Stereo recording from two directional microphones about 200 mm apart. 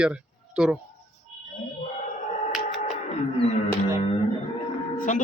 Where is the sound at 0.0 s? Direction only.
5° right (ahead or behind).